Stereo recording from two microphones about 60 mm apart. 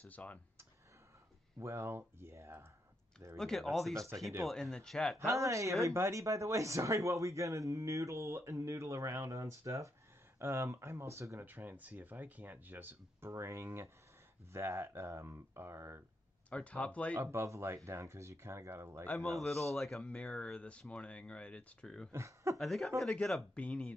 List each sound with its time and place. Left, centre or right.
0.0 s speech: left
1.6 s speech: right
3.3 s a man's voice: centre
5.2 s speech: right
11.4 s speech: right
13.3 s speech: right
16.4 s speech: left
17.2 s speech: right
19.1 s a man's voice: centre
21.8 s speech: centre
22.1 s speech: right
22.6 s a man's voice: centre
23.5 s speech: centre